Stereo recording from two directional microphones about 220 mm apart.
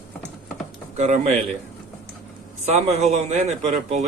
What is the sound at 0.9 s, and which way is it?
Speech, 30° right (ahead or behind).